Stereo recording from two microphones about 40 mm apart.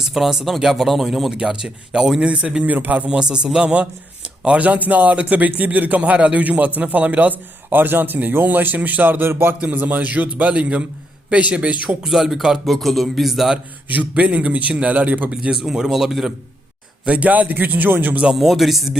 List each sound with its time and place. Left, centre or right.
0.0 s a man's voice: centre
1.3 s speech: centre
2.6 s a man's voice: right
3.2 s speech: right
4.6 s a man's voice: right
7.7 s a man's voice: right
9.6 s a man's voice: right
10.5 s a man's voice: right
12.0 s a man's voice: centre
12.6 s speech: centre
14.1 s a man's voice: right
15.5 s a man's voice: centre
17.1 s a man's voice: right
18.3 s speech: centre